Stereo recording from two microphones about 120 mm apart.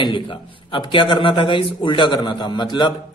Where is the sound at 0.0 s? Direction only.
40° left (ahead or behind).